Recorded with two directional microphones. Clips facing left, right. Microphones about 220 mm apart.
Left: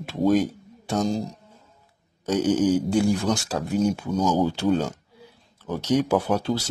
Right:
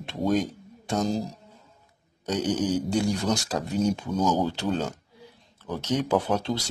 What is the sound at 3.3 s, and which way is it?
Speech, 5° left (ahead or behind).